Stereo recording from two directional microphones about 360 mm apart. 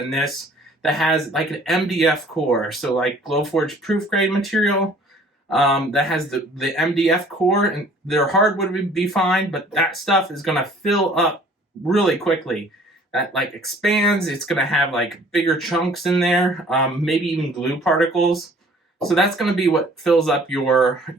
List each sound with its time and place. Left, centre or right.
0.8 s speech: centre